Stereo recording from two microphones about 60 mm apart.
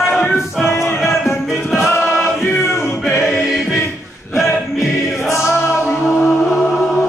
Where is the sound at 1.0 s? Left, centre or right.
Centre.